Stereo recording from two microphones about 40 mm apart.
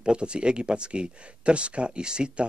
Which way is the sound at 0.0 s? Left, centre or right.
Right.